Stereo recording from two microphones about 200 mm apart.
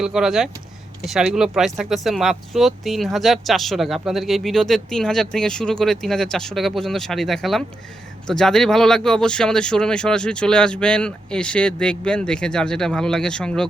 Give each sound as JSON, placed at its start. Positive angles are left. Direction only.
{"t": 0.0, "sound": "speech", "side_deg": -5}